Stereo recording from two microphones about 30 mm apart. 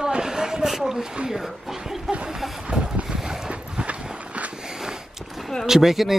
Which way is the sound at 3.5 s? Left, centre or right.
Right.